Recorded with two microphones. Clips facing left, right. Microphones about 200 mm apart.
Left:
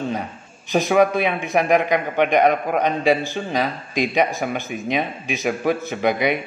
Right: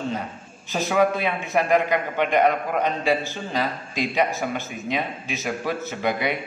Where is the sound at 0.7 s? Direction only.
15° left (ahead or behind).